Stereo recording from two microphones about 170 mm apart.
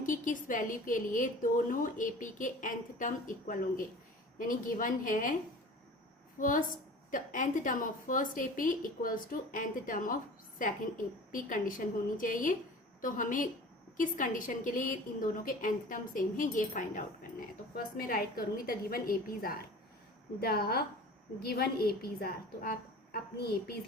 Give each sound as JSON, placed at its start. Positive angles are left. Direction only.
{"t": 0.0, "sound": "a woman's voice", "side_deg": 50}
{"t": 6.4, "sound": "a woman's voice", "side_deg": 50}
{"t": 17.7, "sound": "a woman's voice", "side_deg": 60}